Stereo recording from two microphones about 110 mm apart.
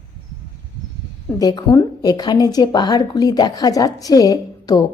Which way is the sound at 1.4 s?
35° left (ahead or behind).